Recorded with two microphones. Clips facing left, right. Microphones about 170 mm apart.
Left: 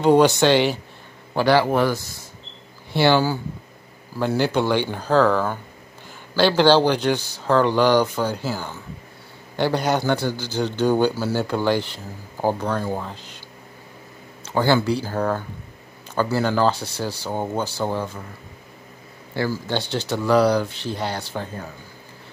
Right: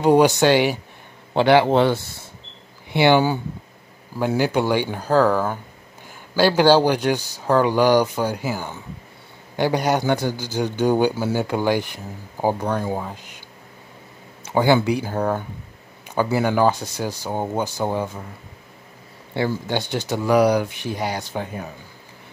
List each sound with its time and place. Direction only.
0.0 s speech: 10° right (ahead or behind)
1.3 s a man's voice: 20° right (ahead or behind)
14.4 s speech: 15° right (ahead or behind)
19.3 s speech: 20° right (ahead or behind)